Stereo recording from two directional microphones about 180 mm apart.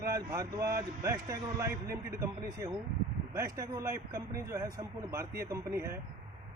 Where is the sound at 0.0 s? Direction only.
20° right (ahead or behind).